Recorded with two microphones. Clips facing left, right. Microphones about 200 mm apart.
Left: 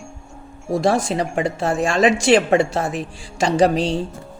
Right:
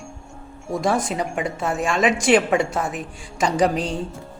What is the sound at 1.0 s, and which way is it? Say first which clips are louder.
A woman's voice: left 4 dB; 30° left (ahead or behind).